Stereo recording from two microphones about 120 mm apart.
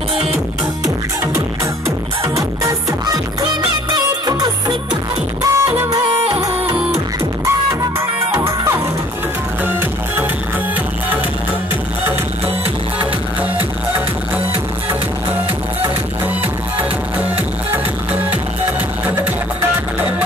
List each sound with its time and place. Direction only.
2.2 s music: 30° right (ahead or behind)
3.9 s music: 35° right (ahead or behind)
8.4 s music: 25° right (ahead or behind)